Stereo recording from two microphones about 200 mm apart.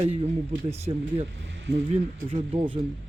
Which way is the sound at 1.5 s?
60° right (ahead or behind).